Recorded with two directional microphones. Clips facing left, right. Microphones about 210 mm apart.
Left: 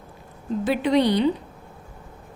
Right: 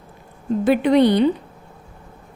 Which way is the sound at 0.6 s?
55° right (ahead or behind).